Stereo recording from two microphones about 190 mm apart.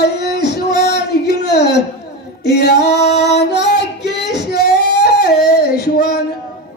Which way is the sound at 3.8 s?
65° left (ahead or behind).